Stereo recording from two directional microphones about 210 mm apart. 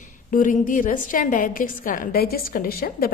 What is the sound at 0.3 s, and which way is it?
A woman's voice, 40° left (ahead or behind).